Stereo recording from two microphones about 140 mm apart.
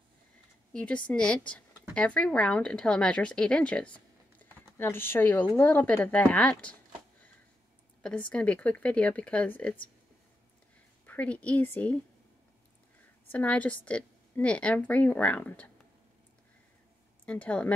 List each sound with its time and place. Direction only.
0.7 s a woman's voice: 10° left (ahead or behind)
8.0 s a woman's voice: 10° left (ahead or behind)
11.1 s a woman's voice: 10° left (ahead or behind)
13.3 s a woman's voice: 10° left (ahead or behind)
17.3 s a woman's voice: 10° left (ahead or behind)